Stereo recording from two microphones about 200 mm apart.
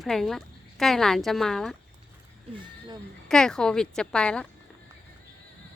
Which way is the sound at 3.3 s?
5° left (ahead or behind).